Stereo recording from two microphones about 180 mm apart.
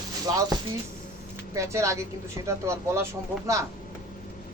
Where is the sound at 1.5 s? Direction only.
15° right (ahead or behind).